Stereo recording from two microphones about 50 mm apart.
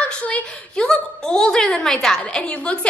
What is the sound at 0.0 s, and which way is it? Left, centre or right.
A woman's voice, left.